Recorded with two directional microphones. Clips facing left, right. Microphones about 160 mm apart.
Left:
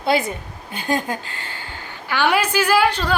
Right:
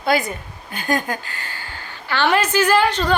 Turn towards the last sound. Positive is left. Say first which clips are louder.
# right 1 dB
turn(degrees=10)  # may be behind; listen again after turning